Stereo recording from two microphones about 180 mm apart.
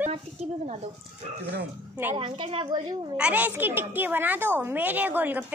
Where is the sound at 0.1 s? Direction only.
35° right (ahead or behind).